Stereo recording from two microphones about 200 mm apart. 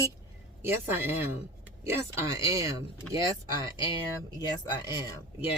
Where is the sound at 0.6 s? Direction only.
10° right (ahead or behind).